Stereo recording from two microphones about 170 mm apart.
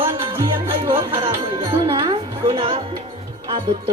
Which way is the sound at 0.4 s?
30° right (ahead or behind).